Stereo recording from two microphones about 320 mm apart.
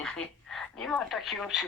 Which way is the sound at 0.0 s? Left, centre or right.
Centre.